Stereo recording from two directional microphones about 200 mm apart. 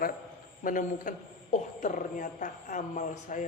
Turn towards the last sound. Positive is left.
turn(degrees=40)  # may be behind; listen again after turning